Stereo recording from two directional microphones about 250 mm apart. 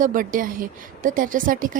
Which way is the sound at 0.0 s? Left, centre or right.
Right.